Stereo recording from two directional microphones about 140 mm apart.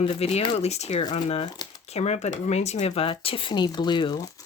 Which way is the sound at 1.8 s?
50° left (ahead or behind).